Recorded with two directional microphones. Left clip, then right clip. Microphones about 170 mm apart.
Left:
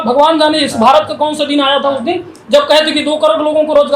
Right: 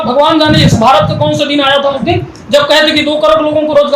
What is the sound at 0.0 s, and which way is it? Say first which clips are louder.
A man's voice: right 1 dB; 65° left (ahead or behind).